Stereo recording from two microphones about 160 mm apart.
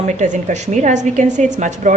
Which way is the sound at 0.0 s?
50° right (ahead or behind).